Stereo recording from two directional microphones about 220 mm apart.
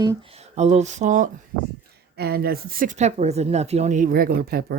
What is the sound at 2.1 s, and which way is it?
Speech, 45° right (ahead or behind).